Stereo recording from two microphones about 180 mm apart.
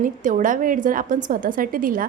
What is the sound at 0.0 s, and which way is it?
A woman's voice, 45° right (ahead or behind).